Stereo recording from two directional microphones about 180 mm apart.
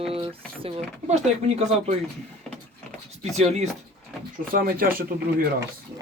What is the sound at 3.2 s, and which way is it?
Speech, 35° right (ahead or behind).